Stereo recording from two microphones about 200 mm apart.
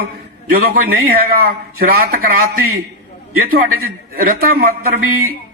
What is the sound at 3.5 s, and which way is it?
Speech, 45° right (ahead or behind).